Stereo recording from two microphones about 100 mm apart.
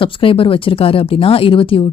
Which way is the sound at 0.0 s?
60° left (ahead or behind).